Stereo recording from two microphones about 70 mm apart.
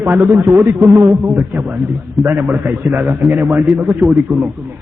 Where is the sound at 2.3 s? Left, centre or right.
Right.